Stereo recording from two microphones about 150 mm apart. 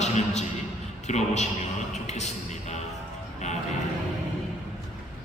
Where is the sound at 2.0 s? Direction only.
50° left (ahead or behind).